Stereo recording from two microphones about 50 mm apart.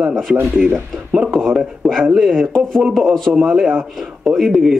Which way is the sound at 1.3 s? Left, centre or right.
Centre.